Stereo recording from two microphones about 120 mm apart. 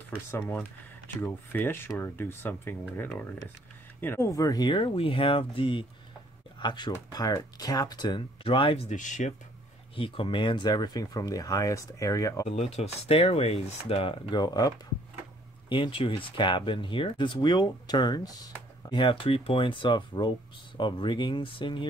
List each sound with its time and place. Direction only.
0.3 s speech: 15° left (ahead or behind); by 8.8 s 45° left (ahead or behind)
8.8 s speech: 90° left
9.9 s speech: 45° left (ahead or behind); by 12.4 s 25° left (ahead or behind)
12.4 s speech: 65° left (ahead or behind)
14.3 s speech: 35° left (ahead or behind)
15.7 s speech: 45° left (ahead or behind)